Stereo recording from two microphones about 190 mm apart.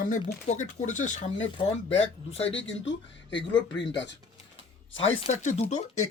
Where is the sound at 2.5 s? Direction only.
75° left (ahead or behind).